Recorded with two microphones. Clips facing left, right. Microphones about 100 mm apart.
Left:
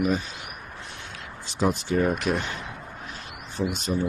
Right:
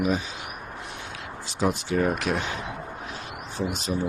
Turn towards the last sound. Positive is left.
turn(degrees=0)  # may be behind; listen again after turning